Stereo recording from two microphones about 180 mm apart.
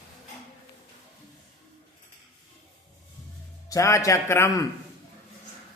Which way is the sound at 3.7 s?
15° left (ahead or behind).